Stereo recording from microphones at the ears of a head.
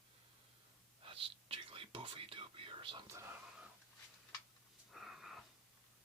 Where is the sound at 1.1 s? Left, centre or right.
Right.